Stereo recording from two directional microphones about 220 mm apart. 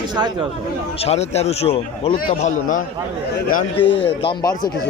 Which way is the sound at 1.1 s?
30° left (ahead or behind).